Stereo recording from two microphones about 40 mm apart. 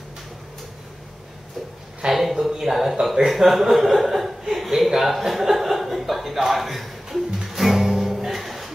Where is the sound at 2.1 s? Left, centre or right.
Centre.